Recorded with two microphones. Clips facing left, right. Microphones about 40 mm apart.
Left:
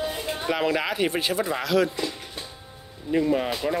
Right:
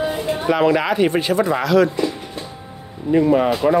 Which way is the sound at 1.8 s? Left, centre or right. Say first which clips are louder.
Right 8 dB; right.